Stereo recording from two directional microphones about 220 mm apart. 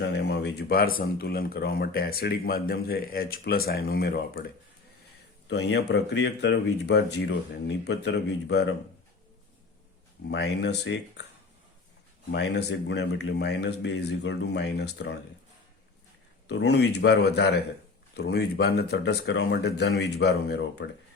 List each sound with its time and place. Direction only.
0.1 s a sound: 50° left (ahead or behind)
0.9 s speech: 45° left (ahead or behind)
5.5 s speech: 50° left (ahead or behind)
10.2 s speech: 50° left (ahead or behind)
12.3 s speech: 50° left (ahead or behind)
16.5 s speech: 50° left (ahead or behind)